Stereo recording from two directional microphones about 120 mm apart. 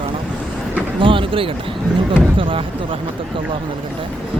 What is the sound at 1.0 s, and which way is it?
Speech, 45° right (ahead or behind).